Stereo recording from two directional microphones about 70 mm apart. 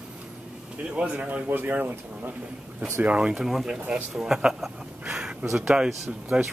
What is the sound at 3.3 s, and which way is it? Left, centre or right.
Speech, centre.